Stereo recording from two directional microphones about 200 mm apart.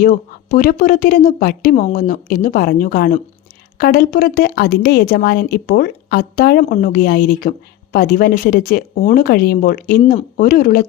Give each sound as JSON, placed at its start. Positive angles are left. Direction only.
{"t": 0.0, "sound": "speech", "side_deg": 45}